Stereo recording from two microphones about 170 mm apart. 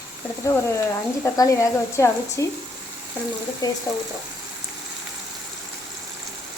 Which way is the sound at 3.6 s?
20° left (ahead or behind).